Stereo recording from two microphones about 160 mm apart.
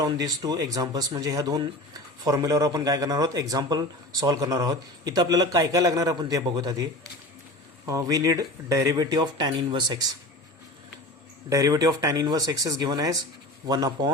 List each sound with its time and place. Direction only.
0.0 s speech: 25° right (ahead or behind)
7.9 s speech: 20° right (ahead or behind)
11.4 s speech: 20° right (ahead or behind)